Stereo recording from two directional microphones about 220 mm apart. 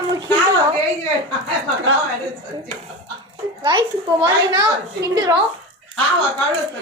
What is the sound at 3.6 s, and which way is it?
A child's voice, 20° right (ahead or behind).